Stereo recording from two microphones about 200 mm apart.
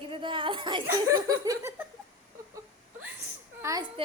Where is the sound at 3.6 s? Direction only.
15° right (ahead or behind).